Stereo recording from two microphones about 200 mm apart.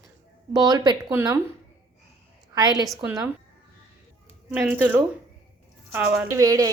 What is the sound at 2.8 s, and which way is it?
Speech, 5° right (ahead or behind).